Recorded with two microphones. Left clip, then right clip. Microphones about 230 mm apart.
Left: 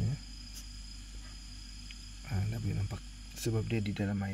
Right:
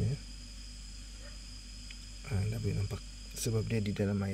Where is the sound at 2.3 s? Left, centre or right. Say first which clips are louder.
Right 2 dB; centre.